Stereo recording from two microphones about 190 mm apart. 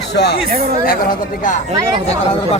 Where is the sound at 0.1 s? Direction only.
60° left (ahead or behind).